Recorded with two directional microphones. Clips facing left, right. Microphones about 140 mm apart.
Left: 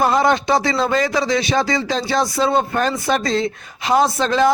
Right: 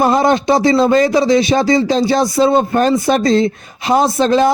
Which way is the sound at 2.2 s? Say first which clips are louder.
Right 6 dB; 20° right (ahead or behind).